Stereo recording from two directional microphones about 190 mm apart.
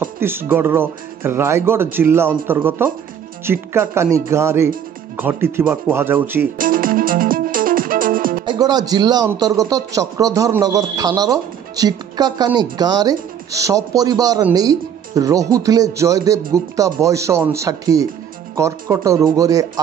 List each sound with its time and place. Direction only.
0.0 s speech: 10° right (ahead or behind)
6.6 s music: 45° right (ahead or behind)
8.5 s a man's voice: 20° right (ahead or behind)